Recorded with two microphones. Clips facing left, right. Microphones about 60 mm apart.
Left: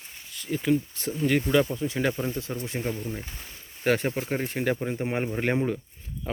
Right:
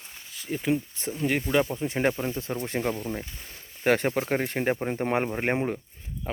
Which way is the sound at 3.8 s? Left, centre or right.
Right.